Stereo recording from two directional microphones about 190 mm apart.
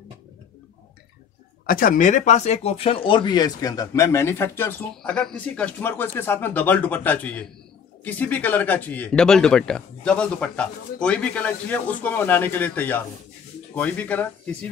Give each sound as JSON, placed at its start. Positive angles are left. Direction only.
{"t": 1.7, "sound": "speech", "side_deg": 45}